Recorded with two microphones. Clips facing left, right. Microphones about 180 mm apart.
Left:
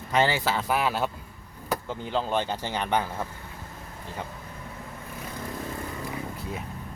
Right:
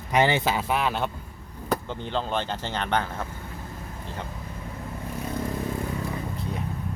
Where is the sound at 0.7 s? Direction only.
5° left (ahead or behind).